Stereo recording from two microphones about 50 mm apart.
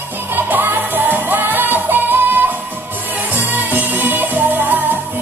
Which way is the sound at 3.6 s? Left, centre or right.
Right.